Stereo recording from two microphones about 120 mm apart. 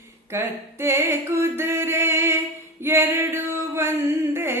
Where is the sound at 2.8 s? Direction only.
20° right (ahead or behind).